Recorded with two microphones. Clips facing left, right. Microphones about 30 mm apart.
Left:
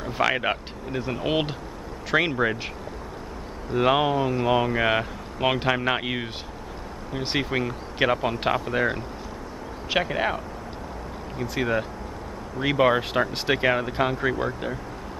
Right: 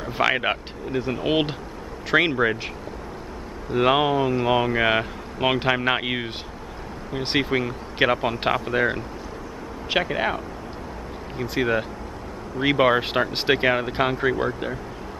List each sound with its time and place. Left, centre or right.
0.0 s speech: centre
3.7 s speech: centre